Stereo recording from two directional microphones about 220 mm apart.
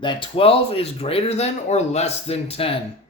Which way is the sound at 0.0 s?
20° left (ahead or behind).